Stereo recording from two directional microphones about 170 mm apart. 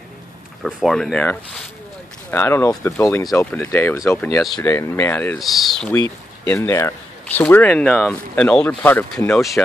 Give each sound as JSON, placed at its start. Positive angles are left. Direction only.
{"t": 0.6, "sound": "speech", "side_deg": 0}
{"t": 5.4, "sound": "speech", "side_deg": 0}
{"t": 6.5, "sound": "speech", "side_deg": 15}